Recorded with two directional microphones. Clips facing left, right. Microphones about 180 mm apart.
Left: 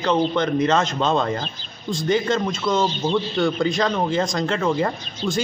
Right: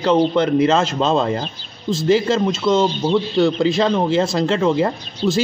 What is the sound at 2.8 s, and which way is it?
Speech, 5° right (ahead or behind).